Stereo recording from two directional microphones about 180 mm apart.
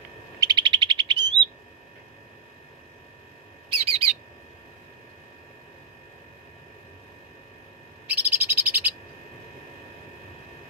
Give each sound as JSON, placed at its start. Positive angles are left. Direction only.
{"t": 0.3, "sound": "bird", "side_deg": -25}
{"t": 3.7, "sound": "bird", "side_deg": -35}
{"t": 8.0, "sound": "bird", "side_deg": -10}